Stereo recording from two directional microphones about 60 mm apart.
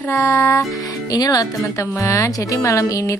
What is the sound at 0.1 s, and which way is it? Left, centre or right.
Music, left.